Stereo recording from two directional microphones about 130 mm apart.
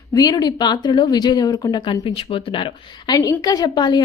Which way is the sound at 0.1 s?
30° left (ahead or behind).